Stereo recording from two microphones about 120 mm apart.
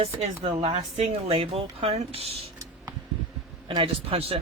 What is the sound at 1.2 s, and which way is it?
Speech, 55° right (ahead or behind).